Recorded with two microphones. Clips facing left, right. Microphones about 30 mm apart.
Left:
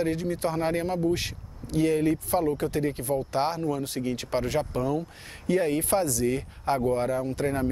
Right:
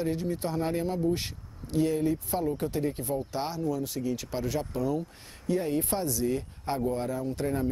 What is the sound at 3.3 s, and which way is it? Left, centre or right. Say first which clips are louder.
Speech: left 4 dB; left.